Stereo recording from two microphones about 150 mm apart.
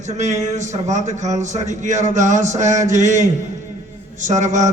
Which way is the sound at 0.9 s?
50° right (ahead or behind).